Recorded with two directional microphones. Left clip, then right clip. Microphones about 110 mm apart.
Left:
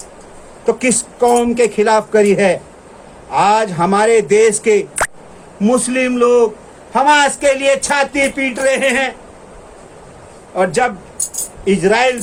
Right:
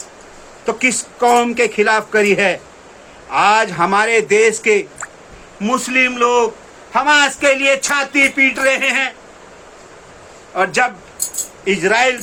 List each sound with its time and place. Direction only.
0.6 s a man's voice: centre (ahead or behind)
10.5 s a man's voice: 10° right (ahead or behind)